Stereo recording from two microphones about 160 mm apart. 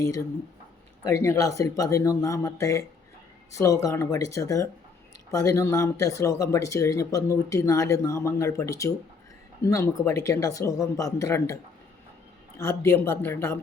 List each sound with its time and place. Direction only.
0.0 s speech: 15° left (ahead or behind)